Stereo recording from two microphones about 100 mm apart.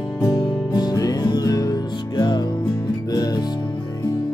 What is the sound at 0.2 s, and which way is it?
Music, 40° left (ahead or behind).